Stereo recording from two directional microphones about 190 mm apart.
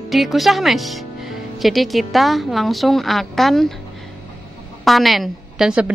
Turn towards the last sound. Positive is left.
turn(degrees=-5)  # may be behind; listen again after turning